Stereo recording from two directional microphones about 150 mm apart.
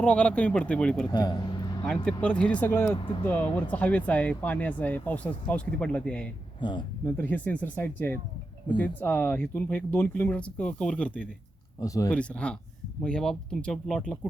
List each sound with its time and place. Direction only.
0.0 s speech: 5° left (ahead or behind)
1.1 s a man's voice: 30° left (ahead or behind)
2.0 s speech: 5° left (ahead or behind)
6.6 s speech: 30° left (ahead or behind)
7.0 s speech: 10° left (ahead or behind)
11.8 s speech: 20° left (ahead or behind)
12.1 s speech: 10° left (ahead or behind)